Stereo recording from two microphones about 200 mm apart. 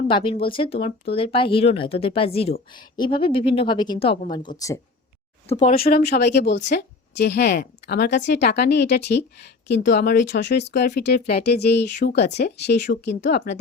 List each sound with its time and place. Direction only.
0.1 s a woman's voice: 25° left (ahead or behind)
5.5 s a woman's voice: 35° left (ahead or behind); by 13.6 s 55° left (ahead or behind)